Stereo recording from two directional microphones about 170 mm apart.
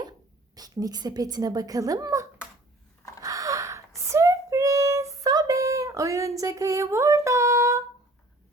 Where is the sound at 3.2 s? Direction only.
20° right (ahead or behind).